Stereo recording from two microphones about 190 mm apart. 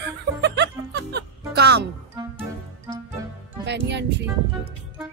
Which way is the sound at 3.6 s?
65° right (ahead or behind).